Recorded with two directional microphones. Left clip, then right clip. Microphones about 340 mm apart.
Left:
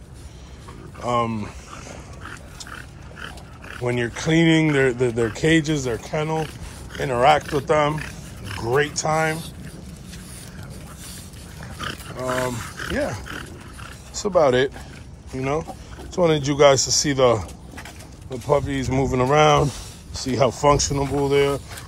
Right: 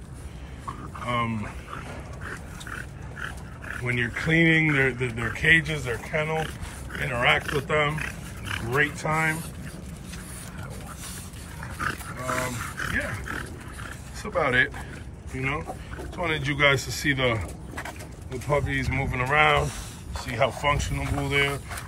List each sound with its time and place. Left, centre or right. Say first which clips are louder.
1.0 s speech: left 6 dB; centre
3.8 s speech: left 4 dB; centre
12.5 s speech: left 3 dB; centre
18.5 s speech: left 5 dB; centre